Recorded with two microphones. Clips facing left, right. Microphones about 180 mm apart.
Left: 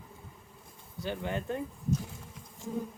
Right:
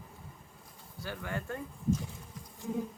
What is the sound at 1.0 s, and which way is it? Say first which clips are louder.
Speech: left 4 dB; 20° left (ahead or behind).